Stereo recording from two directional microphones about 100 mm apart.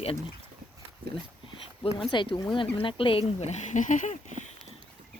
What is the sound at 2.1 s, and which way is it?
Speech, 55° left (ahead or behind).